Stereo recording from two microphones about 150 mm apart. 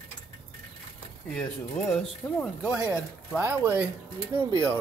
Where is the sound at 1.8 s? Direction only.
5° left (ahead or behind).